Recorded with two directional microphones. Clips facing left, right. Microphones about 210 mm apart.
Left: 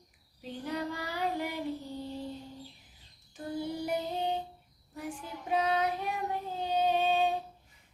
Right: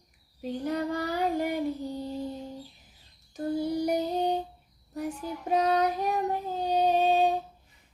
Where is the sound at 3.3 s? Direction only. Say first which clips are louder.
Right 7 dB; 40° right (ahead or behind).